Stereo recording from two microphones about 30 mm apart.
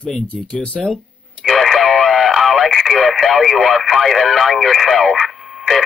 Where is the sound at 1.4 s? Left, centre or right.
Centre.